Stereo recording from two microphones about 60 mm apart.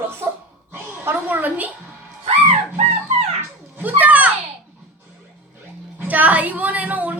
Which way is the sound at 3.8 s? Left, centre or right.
Right.